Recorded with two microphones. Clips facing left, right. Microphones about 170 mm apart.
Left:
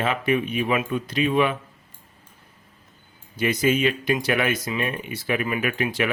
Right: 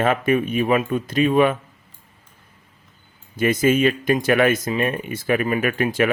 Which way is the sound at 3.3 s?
45° right (ahead or behind).